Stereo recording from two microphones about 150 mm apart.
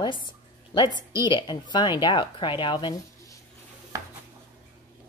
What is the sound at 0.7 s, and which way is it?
A woman's voice, 30° left (ahead or behind).